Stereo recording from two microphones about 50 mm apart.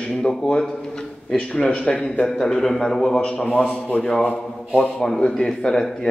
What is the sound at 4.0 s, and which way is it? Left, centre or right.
Speech, centre.